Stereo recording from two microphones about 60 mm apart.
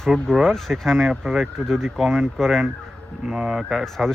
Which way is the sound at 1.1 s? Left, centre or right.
Centre.